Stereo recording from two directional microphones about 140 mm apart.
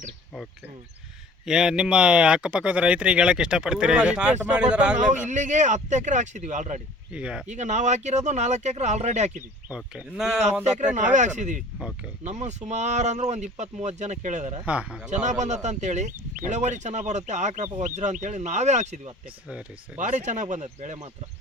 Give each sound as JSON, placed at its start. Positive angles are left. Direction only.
{"t": 1.5, "sound": "speech", "side_deg": -5}
{"t": 4.9, "sound": "speech", "side_deg": -60}
{"t": 7.1, "sound": "speech", "side_deg": -10}
{"t": 7.4, "sound": "speech", "side_deg": -60}
{"t": 9.6, "sound": "speech", "side_deg": -5}
{"t": 10.4, "sound": "speech", "side_deg": -60}
{"t": 14.6, "sound": "speech", "side_deg": -10}
{"t": 15.1, "sound": "speech", "side_deg": -60}